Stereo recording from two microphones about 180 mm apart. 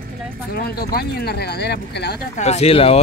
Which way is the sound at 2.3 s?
40° left (ahead or behind).